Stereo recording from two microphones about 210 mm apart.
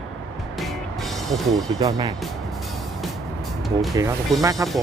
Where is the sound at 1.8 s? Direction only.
15° right (ahead or behind).